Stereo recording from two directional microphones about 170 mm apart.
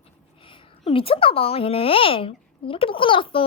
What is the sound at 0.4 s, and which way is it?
Speech, 30° left (ahead or behind).